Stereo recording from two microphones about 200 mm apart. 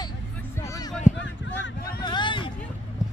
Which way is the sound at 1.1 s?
65° left (ahead or behind).